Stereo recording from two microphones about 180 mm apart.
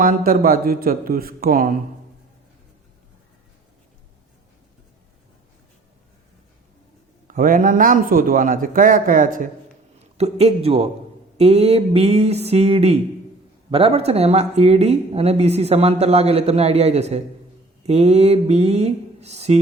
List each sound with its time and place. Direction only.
0.0 s a man's voice: 50° right (ahead or behind)
7.3 s a man's voice: 50° right (ahead or behind)
10.0 s a man's voice: 35° right (ahead or behind)